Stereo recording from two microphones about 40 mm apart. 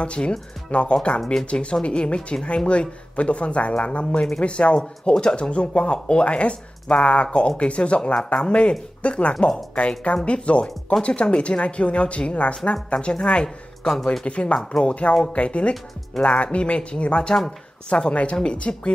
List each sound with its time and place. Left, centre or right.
0.0 s speech: left
13.8 s speech: centre
14.2 s speech: left